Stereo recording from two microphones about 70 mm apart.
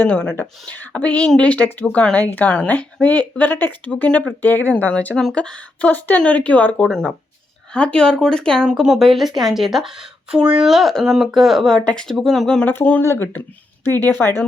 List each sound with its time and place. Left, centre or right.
0.0 s speech: centre
6.8 s a woman's voice: centre
7.7 s speech: centre
8.6 s a woman's voice: centre
10.7 s a woman's voice: centre
12.6 s speech: left